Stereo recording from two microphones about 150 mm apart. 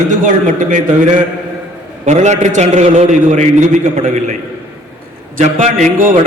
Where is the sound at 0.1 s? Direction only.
60° right (ahead or behind).